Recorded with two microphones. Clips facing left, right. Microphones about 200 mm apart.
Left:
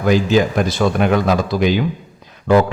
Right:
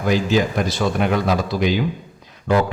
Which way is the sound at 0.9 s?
60° left (ahead or behind).